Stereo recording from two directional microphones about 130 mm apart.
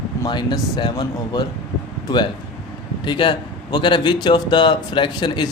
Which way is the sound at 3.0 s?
35° left (ahead or behind).